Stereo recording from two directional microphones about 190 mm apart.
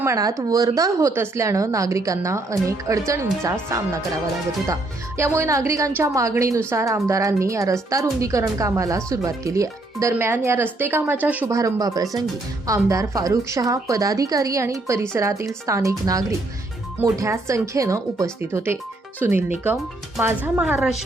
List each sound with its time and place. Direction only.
0.0 s speech: 15° right (ahead or behind)